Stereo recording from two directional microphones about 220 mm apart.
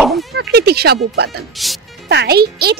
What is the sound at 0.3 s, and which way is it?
Speech, 50° right (ahead or behind).